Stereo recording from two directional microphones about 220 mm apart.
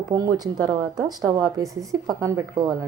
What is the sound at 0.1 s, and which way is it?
A woman's voice, 15° right (ahead or behind).